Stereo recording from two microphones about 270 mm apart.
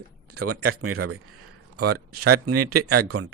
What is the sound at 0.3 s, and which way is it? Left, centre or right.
A man's voice, right.